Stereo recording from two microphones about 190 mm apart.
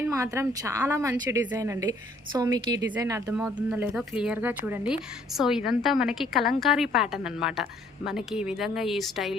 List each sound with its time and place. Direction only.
0.0 s a woman's voice: 15° right (ahead or behind)
3.3 s speech: 5° right (ahead or behind)